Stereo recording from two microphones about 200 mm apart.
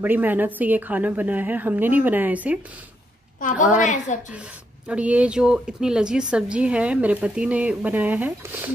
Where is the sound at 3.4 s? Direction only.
40° left (ahead or behind).